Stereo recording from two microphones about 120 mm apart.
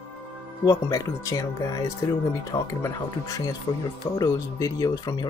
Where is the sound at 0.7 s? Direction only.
30° left (ahead or behind).